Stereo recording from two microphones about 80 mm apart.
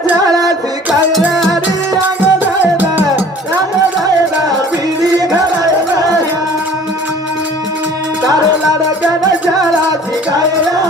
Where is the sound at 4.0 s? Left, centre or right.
Right.